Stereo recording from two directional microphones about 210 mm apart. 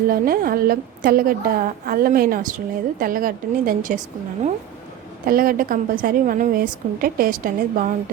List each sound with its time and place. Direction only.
0.1 s a woman's voice: 45° right (ahead or behind)
5.2 s a woman's voice: 45° right (ahead or behind)